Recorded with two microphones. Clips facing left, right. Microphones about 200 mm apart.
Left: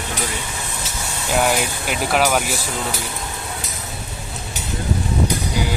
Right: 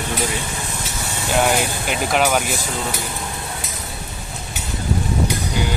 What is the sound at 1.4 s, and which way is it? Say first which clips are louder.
Speech: right 1 dB; centre (ahead or behind).